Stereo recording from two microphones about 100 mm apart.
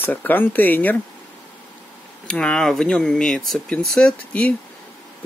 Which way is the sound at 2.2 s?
10° left (ahead or behind).